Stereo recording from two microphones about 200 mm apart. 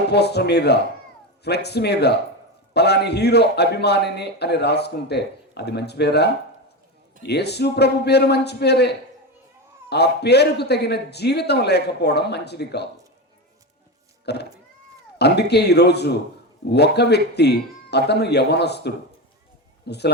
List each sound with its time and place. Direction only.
0.1 s a man's voice: 55° left (ahead or behind)
14.3 s a man's voice: 55° left (ahead or behind)